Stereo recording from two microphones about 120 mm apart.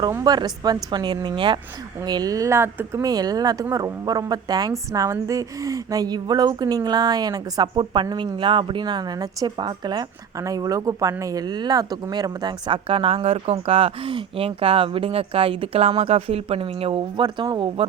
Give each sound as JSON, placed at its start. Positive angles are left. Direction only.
{"t": 0.3, "sound": "speech", "side_deg": -35}